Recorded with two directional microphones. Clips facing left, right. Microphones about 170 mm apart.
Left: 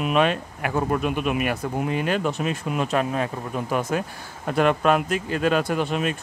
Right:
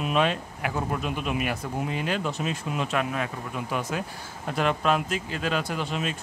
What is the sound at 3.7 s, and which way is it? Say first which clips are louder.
Speech: left 6 dB; 50° left (ahead or behind).